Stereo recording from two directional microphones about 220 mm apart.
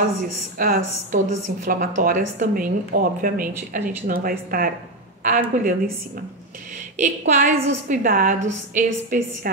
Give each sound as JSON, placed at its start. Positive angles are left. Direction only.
{"t": 0.6, "sound": "speech", "side_deg": -40}
{"t": 7.0, "sound": "speech", "side_deg": -35}